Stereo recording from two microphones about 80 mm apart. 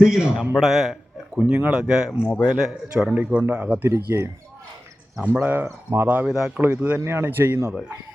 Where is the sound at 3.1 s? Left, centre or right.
Centre.